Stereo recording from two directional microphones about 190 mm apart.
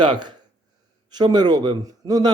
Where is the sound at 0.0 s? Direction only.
25° right (ahead or behind).